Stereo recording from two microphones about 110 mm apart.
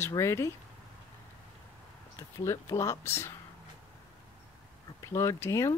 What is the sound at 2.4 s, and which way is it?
Speech, 30° left (ahead or behind).